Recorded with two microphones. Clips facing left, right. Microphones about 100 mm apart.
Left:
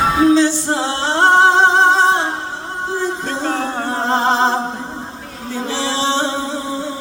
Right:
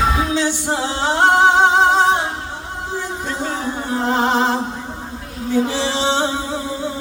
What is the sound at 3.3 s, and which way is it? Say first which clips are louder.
Music: left 3 dB; 60° left (ahead or behind).